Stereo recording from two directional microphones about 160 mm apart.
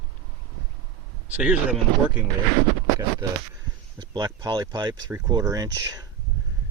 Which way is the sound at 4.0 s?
25° right (ahead or behind).